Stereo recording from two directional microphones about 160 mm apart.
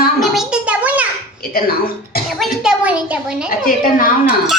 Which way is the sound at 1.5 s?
70° left (ahead or behind).